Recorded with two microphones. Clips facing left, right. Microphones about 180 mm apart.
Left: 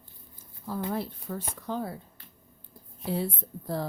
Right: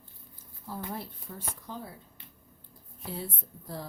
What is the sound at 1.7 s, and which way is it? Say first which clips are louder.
Speech: left 11 dB; 70° left (ahead or behind).